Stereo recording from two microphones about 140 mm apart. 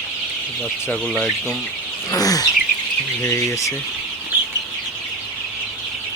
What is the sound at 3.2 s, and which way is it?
Speech, 20° left (ahead or behind).